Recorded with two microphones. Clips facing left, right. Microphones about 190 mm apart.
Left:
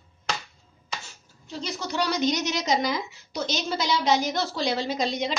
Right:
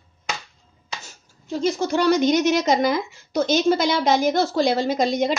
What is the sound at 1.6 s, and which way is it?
Speech, 50° right (ahead or behind).